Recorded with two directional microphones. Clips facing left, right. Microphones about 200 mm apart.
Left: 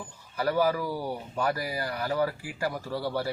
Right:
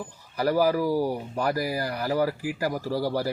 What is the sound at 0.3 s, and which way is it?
Speech, 40° right (ahead or behind).